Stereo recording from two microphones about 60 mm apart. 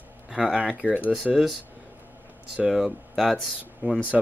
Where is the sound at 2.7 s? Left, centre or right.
Centre.